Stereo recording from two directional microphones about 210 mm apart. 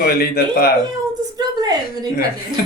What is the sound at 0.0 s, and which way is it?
Speech, 50° left (ahead or behind).